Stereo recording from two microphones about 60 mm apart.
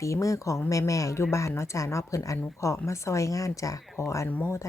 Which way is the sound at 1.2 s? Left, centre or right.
Left.